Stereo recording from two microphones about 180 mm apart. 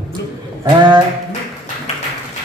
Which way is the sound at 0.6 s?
25° right (ahead or behind).